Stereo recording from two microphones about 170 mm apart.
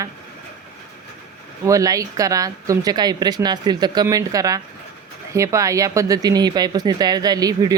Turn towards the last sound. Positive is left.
turn(degrees=-20)  # may be behind; listen again after turning